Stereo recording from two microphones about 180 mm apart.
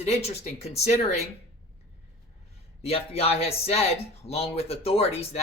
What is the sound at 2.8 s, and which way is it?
Speech, 35° left (ahead or behind).